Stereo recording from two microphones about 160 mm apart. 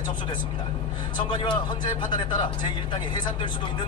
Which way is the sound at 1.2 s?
30° left (ahead or behind).